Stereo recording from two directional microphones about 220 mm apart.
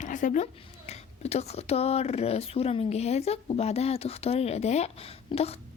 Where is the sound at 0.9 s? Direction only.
30° left (ahead or behind).